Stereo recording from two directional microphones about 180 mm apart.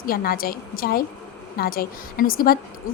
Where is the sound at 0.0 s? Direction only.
55° left (ahead or behind).